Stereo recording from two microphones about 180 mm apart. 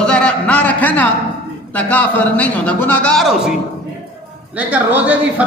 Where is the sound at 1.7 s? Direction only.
10° left (ahead or behind).